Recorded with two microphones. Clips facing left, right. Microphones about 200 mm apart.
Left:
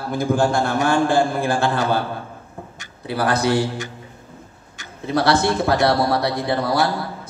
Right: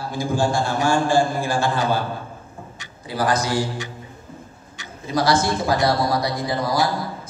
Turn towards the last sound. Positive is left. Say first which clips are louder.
# left 2 dB
turn(degrees=65)  # may be behind; listen again after turning